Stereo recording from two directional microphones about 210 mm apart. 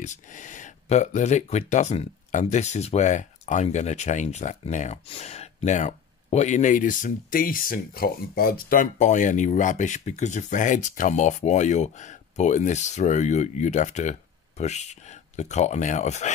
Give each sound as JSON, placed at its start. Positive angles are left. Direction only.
{"t": 0.0, "sound": "speech", "side_deg": 35}